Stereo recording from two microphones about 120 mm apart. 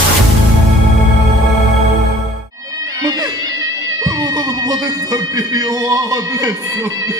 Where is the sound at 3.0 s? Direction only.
35° right (ahead or behind).